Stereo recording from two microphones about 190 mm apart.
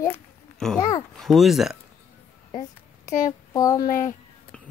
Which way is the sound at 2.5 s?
20° left (ahead or behind).